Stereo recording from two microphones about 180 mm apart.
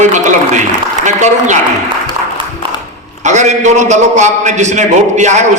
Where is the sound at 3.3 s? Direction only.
40° right (ahead or behind).